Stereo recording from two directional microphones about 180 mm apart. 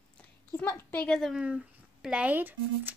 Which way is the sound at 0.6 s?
10° left (ahead or behind).